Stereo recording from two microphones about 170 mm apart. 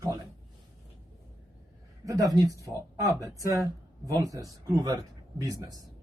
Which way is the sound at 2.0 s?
20° right (ahead or behind).